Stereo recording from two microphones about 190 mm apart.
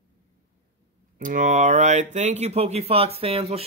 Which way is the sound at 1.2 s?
40° right (ahead or behind).